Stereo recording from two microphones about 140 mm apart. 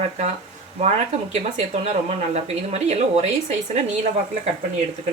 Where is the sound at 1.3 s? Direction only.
50° right (ahead or behind).